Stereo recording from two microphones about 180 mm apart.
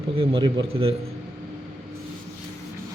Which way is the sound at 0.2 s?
30° right (ahead or behind).